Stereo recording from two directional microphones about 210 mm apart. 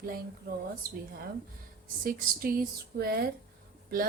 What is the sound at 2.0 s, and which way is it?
Speech, 40° right (ahead or behind).